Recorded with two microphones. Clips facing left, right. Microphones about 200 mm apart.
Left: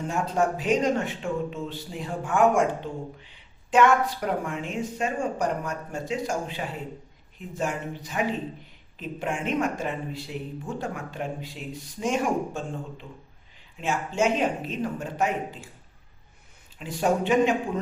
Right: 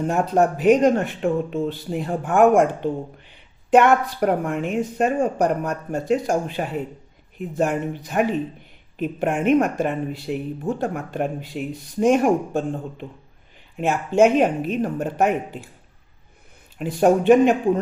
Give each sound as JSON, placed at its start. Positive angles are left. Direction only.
{"t": 0.0, "sound": "speech", "side_deg": -60}
{"t": 16.7, "sound": "speech", "side_deg": -55}